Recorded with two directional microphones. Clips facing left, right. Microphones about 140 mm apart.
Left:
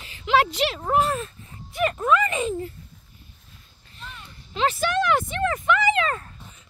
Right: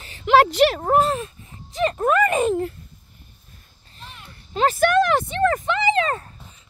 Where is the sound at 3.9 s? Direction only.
35° right (ahead or behind).